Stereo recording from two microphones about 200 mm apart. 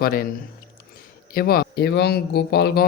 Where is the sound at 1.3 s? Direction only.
50° left (ahead or behind).